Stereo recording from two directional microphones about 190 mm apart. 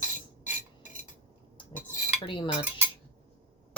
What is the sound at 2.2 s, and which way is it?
Speech, 25° left (ahead or behind).